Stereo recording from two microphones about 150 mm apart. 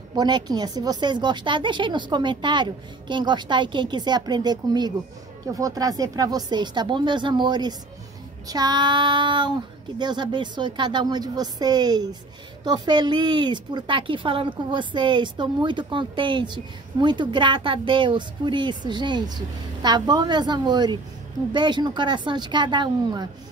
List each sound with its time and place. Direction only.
0.1 s a woman's voice: 30° right (ahead or behind)